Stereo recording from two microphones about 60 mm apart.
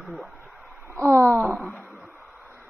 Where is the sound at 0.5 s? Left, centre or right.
Centre.